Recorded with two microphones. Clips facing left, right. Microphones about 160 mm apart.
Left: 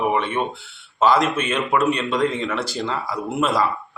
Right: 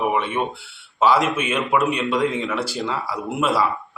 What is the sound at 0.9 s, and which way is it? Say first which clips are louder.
A man's voice: even; 10° right (ahead or behind).